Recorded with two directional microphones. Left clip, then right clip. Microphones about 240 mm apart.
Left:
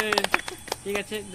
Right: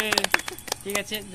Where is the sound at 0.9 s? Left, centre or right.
Right.